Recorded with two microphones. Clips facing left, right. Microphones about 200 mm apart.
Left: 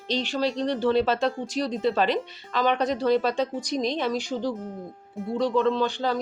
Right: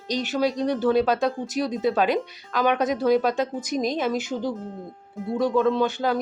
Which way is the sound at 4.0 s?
5° right (ahead or behind).